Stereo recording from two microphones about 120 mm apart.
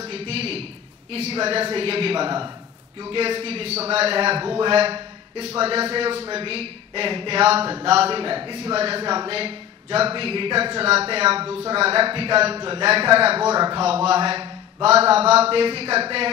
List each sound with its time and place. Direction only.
0.1 s a man's voice: 55° right (ahead or behind); by 2.5 s 40° right (ahead or behind)
3.0 s speech: 50° right (ahead or behind)
4.7 s speech: 55° right (ahead or behind)
12.5 s speech: 40° right (ahead or behind)
13.6 s speech: 40° right (ahead or behind)
13.8 s speech: 55° right (ahead or behind)